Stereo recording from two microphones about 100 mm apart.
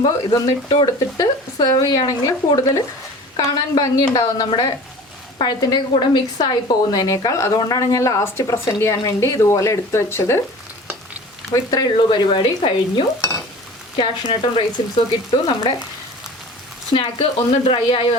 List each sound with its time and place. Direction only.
0.3 s speech: 40° left (ahead or behind)
11.5 s speech: 40° left (ahead or behind)
12.3 s speech: 60° left (ahead or behind)
16.9 s speech: 60° left (ahead or behind)